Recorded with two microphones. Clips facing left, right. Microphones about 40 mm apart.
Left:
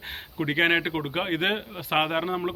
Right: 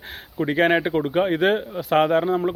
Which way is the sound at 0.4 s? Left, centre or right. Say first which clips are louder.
Right 4 dB; centre.